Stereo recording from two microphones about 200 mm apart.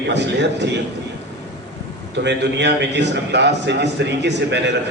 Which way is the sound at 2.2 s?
60° right (ahead or behind).